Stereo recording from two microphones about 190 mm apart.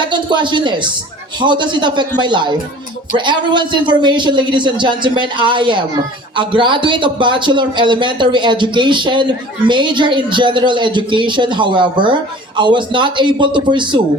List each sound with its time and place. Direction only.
0.0 s speech: 25° right (ahead or behind)